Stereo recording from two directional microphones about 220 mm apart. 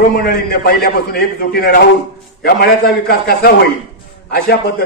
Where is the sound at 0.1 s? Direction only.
40° left (ahead or behind).